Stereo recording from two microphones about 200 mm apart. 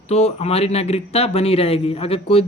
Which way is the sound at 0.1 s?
30° left (ahead or behind).